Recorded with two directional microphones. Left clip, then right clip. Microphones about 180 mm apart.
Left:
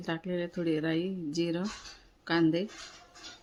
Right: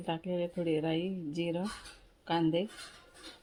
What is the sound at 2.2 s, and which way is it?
Speech, 20° left (ahead or behind).